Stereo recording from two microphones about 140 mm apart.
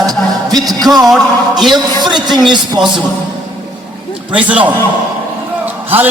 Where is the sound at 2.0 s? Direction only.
30° right (ahead or behind).